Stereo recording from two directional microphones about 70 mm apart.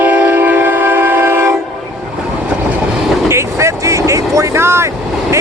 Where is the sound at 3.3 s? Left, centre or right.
Right.